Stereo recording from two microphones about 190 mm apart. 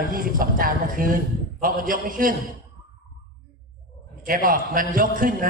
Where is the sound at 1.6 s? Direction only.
45° right (ahead or behind).